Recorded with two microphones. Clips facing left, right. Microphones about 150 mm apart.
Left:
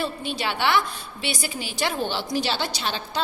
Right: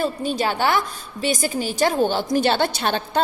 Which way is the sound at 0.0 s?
40° right (ahead or behind).